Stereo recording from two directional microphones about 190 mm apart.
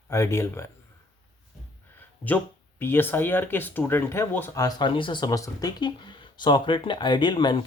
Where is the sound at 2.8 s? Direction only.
10° left (ahead or behind).